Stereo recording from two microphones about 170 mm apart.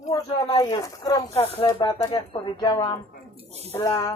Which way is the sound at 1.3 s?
35° left (ahead or behind).